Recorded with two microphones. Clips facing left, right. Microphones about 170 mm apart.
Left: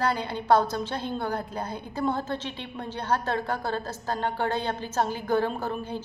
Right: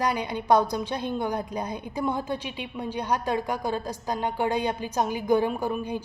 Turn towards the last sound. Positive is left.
turn(degrees=-15)  # may be behind; listen again after turning